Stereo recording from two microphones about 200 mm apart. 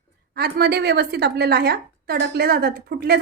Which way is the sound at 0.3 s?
50° right (ahead or behind).